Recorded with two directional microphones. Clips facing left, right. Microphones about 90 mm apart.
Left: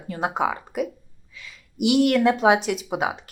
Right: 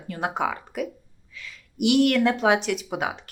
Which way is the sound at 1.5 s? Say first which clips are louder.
Left 1 dB; 5° left (ahead or behind).